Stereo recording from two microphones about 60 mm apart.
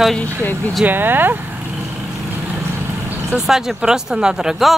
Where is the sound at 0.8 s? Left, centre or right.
Right.